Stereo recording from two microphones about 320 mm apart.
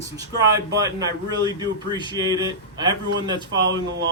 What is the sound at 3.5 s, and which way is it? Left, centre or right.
Speech, right.